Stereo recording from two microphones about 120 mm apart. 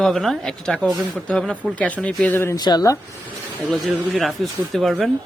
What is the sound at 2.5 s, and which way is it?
Speech, 35° left (ahead or behind).